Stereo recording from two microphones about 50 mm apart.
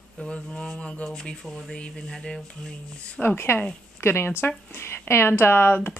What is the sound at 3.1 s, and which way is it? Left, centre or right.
Speech, left.